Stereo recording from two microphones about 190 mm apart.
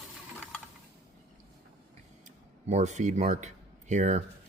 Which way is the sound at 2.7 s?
40° right (ahead or behind).